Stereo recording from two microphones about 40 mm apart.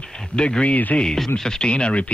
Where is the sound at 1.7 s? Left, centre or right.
Left.